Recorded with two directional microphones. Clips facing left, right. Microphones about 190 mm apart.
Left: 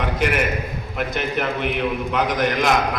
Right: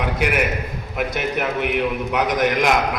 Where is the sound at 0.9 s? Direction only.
10° right (ahead or behind).